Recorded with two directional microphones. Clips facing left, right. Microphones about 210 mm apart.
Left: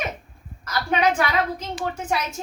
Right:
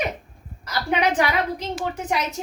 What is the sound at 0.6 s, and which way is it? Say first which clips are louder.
A woman's voice: left 1 dB; 15° right (ahead or behind).